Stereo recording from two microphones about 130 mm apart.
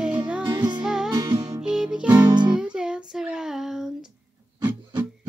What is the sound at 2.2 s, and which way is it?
Music, 35° right (ahead or behind).